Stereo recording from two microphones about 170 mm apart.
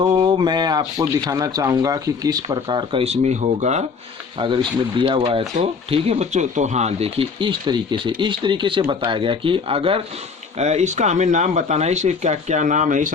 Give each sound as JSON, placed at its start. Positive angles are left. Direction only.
{"t": 0.0, "sound": "speech", "side_deg": -30}
{"t": 4.4, "sound": "speech", "side_deg": -30}